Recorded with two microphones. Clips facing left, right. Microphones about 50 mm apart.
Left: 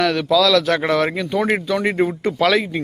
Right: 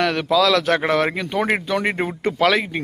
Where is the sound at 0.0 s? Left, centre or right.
Right.